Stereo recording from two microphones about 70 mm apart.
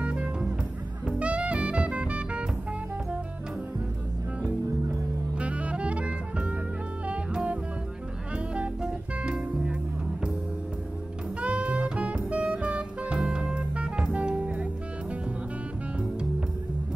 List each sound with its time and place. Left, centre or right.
0.0 s music: centre
1.0 s jazz: centre
5.3 s music: centre
9.2 s music: centre
11.4 s music: centre